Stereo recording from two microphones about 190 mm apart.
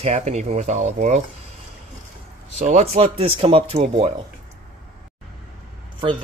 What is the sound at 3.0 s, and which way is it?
Speech, 30° right (ahead or behind).